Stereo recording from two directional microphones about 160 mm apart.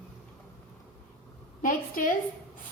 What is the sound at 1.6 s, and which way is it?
Speech, 60° left (ahead or behind).